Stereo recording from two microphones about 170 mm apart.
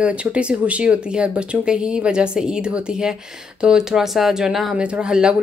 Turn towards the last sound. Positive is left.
turn(degrees=-5)  # may be behind; listen again after turning